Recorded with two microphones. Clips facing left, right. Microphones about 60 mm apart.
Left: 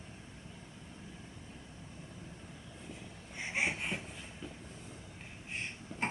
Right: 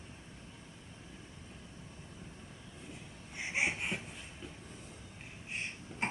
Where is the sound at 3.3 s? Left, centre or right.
Centre.